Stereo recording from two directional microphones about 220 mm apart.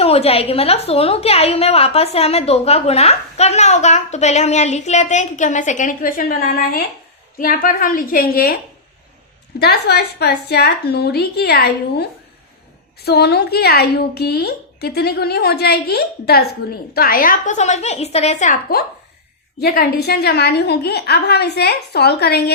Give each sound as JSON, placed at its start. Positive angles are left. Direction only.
{"t": 0.0, "sound": "a woman's voice", "side_deg": 25}
{"t": 9.6, "sound": "a woman's voice", "side_deg": 45}
{"t": 13.1, "sound": "a woman's voice", "side_deg": 45}